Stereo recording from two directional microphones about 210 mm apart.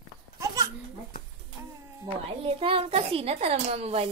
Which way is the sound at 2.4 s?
25° right (ahead or behind).